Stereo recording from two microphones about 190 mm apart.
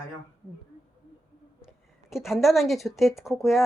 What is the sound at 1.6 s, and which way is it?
A woman's voice, 5° right (ahead or behind).